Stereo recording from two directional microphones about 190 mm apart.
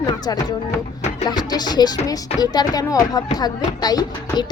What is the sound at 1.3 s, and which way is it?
Music, 20° left (ahead or behind).